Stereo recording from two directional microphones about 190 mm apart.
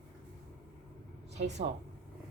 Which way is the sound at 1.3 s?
35° right (ahead or behind).